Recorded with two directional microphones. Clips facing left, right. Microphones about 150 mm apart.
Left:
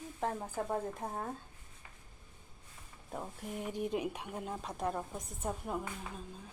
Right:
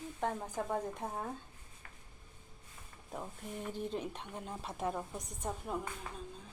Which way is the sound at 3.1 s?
5° left (ahead or behind).